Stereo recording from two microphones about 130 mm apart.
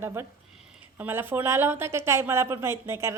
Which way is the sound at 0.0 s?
20° right (ahead or behind).